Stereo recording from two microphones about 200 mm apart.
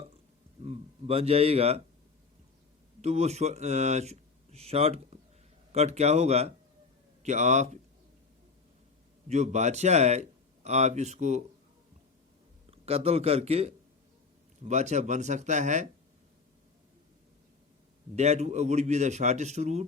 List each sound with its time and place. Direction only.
0.6 s a man's voice: 30° right (ahead or behind)
3.0 s a man's voice: 35° right (ahead or behind)
9.3 s a man's voice: 35° right (ahead or behind)
12.7 s a man's voice: 30° right (ahead or behind)
18.2 s a man's voice: 35° right (ahead or behind)